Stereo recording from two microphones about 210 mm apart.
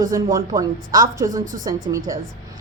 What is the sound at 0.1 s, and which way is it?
A woman's voice, 15° right (ahead or behind).